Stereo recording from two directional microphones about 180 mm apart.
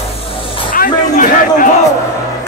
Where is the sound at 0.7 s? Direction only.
50° left (ahead or behind).